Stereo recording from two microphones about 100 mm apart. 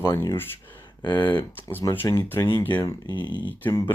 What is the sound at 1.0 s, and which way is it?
Speech, 50° left (ahead or behind).